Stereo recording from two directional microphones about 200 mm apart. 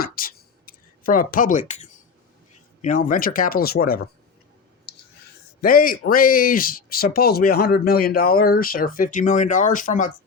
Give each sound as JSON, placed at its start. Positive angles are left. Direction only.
{"t": 0.0, "sound": "a sound", "side_deg": 45}
{"t": 2.8, "sound": "speech", "side_deg": 40}
{"t": 5.6, "sound": "speech", "side_deg": 45}